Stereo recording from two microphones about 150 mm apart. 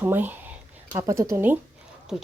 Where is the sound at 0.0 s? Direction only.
15° right (ahead or behind).